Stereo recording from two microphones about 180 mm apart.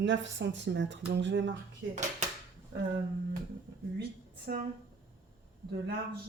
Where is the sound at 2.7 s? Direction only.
80° right.